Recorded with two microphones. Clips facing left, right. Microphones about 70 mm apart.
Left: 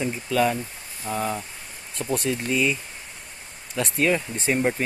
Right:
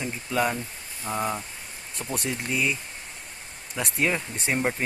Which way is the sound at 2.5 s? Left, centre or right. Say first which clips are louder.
Left 3 dB; centre.